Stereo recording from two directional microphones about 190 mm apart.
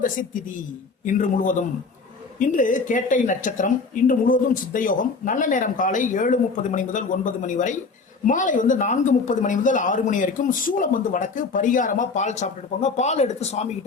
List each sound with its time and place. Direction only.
0.0 s speech: 45° left (ahead or behind)